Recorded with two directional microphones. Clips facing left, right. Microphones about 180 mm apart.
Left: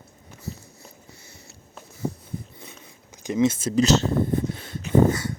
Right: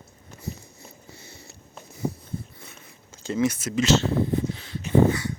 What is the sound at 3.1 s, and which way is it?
Speech, 15° left (ahead or behind).